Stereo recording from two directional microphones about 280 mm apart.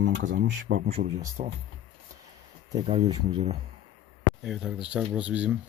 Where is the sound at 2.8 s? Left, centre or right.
Right.